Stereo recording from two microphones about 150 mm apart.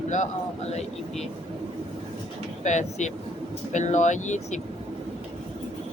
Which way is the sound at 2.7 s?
55° left (ahead or behind).